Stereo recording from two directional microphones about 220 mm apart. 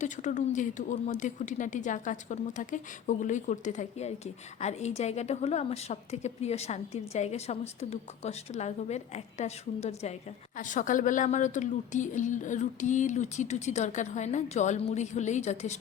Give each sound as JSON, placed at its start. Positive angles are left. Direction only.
{"t": 0.0, "sound": "a woman's voice", "side_deg": 35}